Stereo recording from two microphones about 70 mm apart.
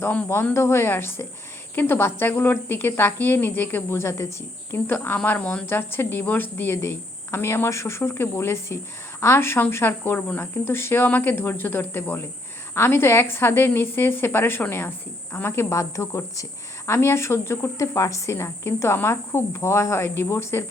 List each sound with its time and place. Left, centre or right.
0.5 s a woman's voice: left; by 5.6 s centre
5.6 s a woman's voice: left
15.7 s a woman's voice: left